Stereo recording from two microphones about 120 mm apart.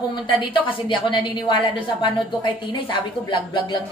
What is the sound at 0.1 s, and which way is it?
A woman's voice, 40° left (ahead or behind).